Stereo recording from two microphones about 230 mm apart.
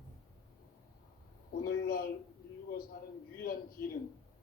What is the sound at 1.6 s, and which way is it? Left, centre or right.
Speech, left.